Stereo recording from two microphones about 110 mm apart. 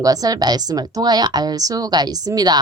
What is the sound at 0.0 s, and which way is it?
A woman's voice, 35° right (ahead or behind).